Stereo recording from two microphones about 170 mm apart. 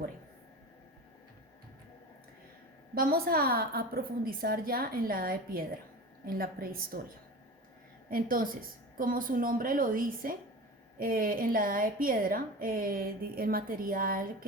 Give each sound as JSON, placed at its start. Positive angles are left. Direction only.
{"t": 2.9, "sound": "a woman's voice", "side_deg": -60}
{"t": 8.1, "sound": "a woman's voice", "side_deg": -55}